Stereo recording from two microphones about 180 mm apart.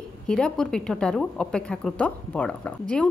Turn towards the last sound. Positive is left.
turn(degrees=5)  # may be behind; listen again after turning